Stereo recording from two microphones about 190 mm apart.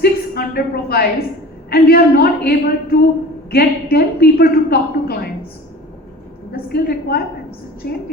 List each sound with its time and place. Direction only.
0.0 s a sound: 55° left (ahead or behind)
1.7 s a woman's voice: 55° left (ahead or behind)
6.5 s a woman's voice: 55° left (ahead or behind)